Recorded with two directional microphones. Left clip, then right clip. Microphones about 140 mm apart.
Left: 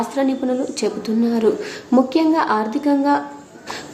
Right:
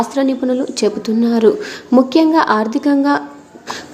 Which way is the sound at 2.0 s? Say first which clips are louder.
Right 5 dB; 30° right (ahead or behind).